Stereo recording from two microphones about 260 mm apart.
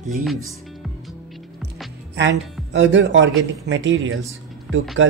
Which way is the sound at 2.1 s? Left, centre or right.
Right.